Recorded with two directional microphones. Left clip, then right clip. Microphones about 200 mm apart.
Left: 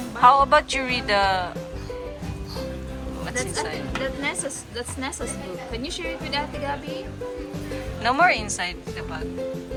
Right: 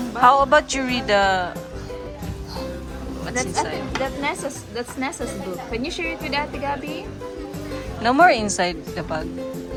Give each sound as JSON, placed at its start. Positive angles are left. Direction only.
{"t": 0.2, "sound": "speech", "side_deg": -5}
{"t": 3.9, "sound": "speech", "side_deg": -50}
{"t": 6.3, "sound": "speech", "side_deg": -45}
{"t": 8.0, "sound": "a woman's voice", "side_deg": -10}